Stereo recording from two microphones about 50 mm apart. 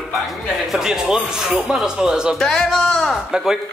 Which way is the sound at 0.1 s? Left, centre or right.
Centre.